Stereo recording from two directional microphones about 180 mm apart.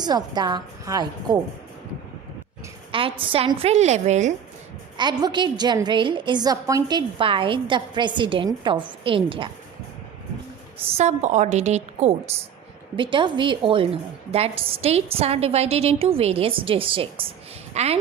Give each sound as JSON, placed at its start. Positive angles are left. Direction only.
{"t": 0.0, "sound": "a woman's voice", "side_deg": -20}
{"t": 2.9, "sound": "a woman's voice", "side_deg": -30}
{"t": 4.9, "sound": "a woman's voice", "side_deg": -25}
{"t": 10.9, "sound": "a woman's voice", "side_deg": -40}
{"t": 13.0, "sound": "a woman's voice", "side_deg": -25}